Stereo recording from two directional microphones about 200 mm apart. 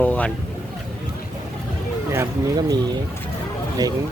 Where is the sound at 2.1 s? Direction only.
15° right (ahead or behind).